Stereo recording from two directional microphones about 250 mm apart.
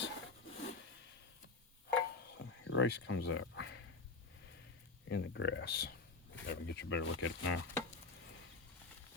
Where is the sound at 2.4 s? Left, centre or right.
Left.